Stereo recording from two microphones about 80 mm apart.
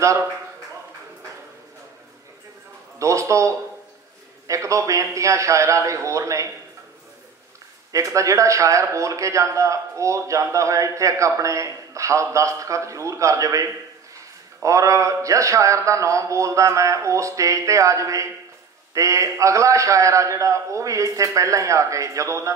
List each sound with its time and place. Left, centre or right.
0.0 s speech: right
3.0 s a man's voice: right
7.9 s a man's voice: right